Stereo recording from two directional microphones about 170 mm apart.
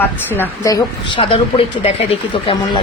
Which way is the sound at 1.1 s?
35° left (ahead or behind).